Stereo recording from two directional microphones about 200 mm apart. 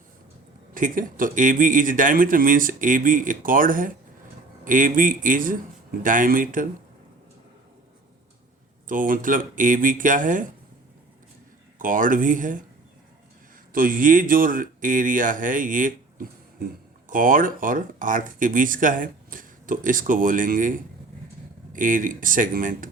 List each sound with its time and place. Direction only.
0.7 s speech: 45° right (ahead or behind)
8.9 s speech: 45° right (ahead or behind)
11.8 s speech: 40° right (ahead or behind)
13.7 s speech: 45° right (ahead or behind)